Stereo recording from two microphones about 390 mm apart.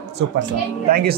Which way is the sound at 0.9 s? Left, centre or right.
Right.